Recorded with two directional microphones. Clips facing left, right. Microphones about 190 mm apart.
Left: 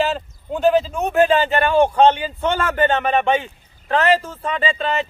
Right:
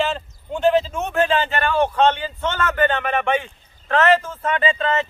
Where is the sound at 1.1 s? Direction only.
10° left (ahead or behind).